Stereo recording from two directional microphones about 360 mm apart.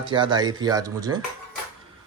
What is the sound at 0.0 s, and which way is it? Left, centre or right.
A man's voice, centre.